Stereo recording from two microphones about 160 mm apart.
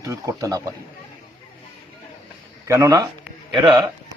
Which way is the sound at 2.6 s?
20° right (ahead or behind).